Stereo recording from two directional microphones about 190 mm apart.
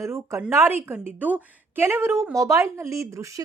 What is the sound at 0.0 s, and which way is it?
A woman's voice, 15° right (ahead or behind).